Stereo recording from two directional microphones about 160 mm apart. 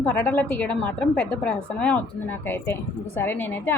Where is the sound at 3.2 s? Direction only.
15° left (ahead or behind).